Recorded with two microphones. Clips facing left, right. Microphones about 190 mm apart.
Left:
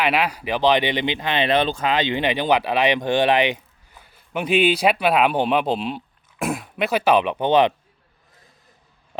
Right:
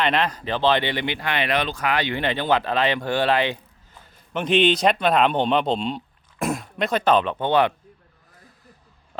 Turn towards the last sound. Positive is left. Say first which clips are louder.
# left 3 dB
turn(degrees=20)  # may be behind; listen again after turning